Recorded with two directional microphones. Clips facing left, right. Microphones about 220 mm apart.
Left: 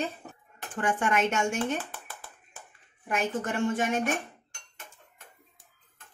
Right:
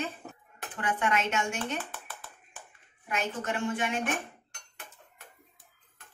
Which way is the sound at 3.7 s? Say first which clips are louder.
Left 4 dB; 45° left (ahead or behind).